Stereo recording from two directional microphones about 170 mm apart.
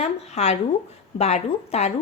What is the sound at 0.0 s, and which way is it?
A woman's voice, 40° left (ahead or behind).